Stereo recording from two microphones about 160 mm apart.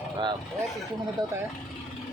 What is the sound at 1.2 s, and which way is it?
Speech, 25° right (ahead or behind).